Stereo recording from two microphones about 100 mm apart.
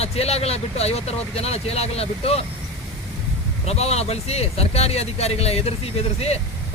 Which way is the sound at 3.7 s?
90° left.